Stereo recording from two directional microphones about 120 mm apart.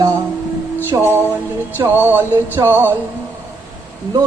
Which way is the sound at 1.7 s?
15° right (ahead or behind).